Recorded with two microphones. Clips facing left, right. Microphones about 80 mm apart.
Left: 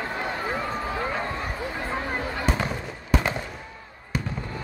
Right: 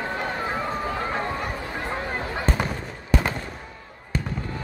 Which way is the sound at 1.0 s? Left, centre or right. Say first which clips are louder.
Right 1 dB; centre.